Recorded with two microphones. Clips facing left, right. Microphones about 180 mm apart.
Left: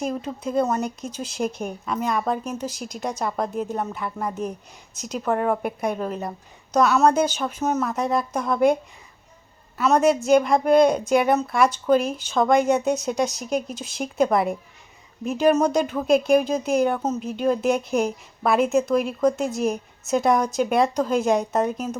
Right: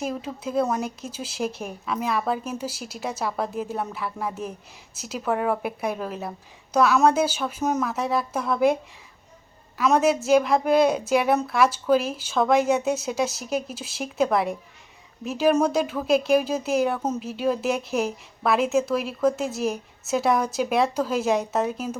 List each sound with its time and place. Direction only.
0.0 s speech: 5° right (ahead or behind)
7.6 s speech: 5° left (ahead or behind)
9.8 s speech: 5° right (ahead or behind)